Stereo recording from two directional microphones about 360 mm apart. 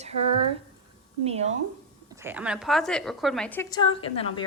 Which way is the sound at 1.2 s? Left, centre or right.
Centre.